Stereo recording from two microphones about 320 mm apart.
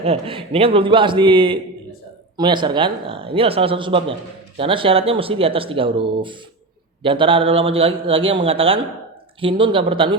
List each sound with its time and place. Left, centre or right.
0.0 s speech: centre